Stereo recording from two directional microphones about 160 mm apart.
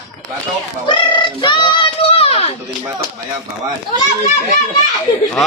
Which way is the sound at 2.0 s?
35° left (ahead or behind).